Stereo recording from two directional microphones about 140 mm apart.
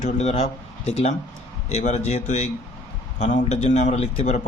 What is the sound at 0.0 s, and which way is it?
A man's voice, 55° left (ahead or behind).